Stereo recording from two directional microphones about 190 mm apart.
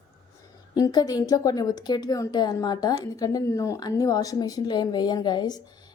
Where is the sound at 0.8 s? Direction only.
20° left (ahead or behind).